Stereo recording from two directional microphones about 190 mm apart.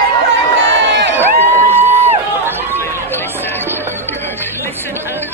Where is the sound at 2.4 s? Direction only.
10° right (ahead or behind).